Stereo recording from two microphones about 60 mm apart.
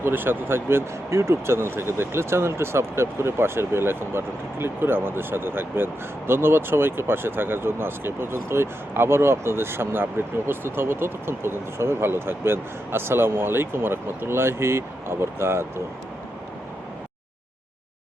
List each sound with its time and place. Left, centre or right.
0.0 s speech: right